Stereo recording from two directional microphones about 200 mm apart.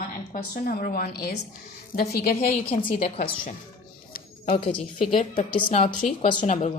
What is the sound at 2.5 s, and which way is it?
Speech, 30° left (ahead or behind).